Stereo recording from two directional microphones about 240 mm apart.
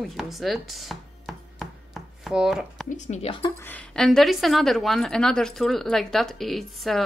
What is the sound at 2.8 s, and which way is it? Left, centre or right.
Speech, left.